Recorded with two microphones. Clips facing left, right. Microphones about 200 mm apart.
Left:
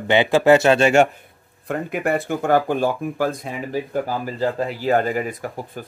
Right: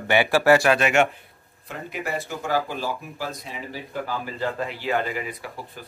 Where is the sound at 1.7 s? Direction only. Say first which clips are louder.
Left 8 dB; 55° left (ahead or behind).